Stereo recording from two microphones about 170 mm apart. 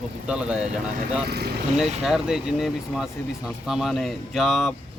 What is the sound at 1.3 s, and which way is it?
Speech, 70° right (ahead or behind).